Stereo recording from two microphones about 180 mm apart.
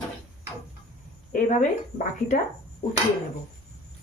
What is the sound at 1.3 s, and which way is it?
Speech, 45° left (ahead or behind).